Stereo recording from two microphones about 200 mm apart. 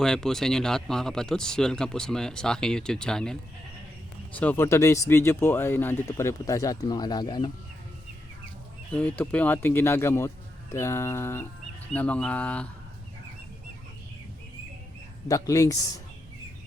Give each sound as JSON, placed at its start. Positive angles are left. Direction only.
{"t": 0.0, "sound": "speech", "side_deg": 0}
{"t": 8.9, "sound": "speech", "side_deg": 5}
{"t": 15.3, "sound": "speech", "side_deg": 15}